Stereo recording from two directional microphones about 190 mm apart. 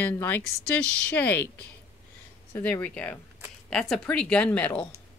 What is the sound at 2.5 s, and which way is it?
Speech, 10° left (ahead or behind).